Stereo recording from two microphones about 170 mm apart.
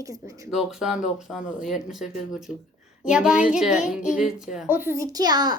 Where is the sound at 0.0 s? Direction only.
20° right (ahead or behind).